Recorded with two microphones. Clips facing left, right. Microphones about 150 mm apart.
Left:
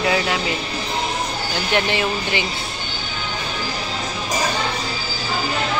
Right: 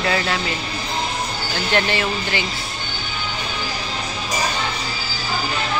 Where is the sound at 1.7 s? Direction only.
15° left (ahead or behind).